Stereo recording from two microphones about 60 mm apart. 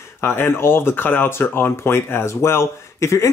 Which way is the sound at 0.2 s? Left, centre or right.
Left.